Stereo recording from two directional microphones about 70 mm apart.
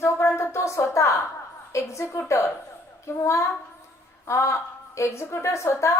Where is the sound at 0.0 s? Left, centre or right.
Left.